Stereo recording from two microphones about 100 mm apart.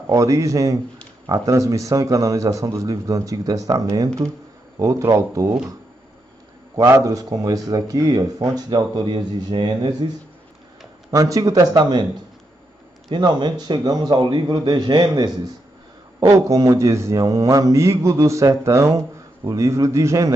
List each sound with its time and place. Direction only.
0.0 s speech: 35° right (ahead or behind)
6.9 s speech: 35° right (ahead or behind)
11.1 s speech: 35° right (ahead or behind)
13.1 s a man's voice: 50° right (ahead or behind)
16.2 s speech: 30° right (ahead or behind)